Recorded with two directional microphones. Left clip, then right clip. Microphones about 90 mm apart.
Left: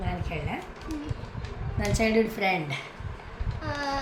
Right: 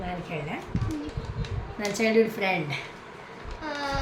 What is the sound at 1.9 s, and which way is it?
Speech, 50° left (ahead or behind).